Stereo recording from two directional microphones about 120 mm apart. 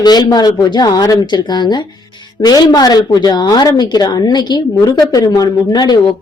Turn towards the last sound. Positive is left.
turn(degrees=35)  # may be behind; listen again after turning